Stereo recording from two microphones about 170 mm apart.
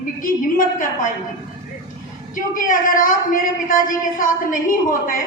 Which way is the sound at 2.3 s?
55° left (ahead or behind).